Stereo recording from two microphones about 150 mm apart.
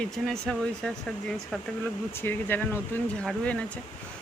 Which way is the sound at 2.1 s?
15° left (ahead or behind).